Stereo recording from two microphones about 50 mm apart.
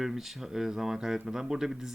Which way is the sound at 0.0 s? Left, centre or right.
Centre.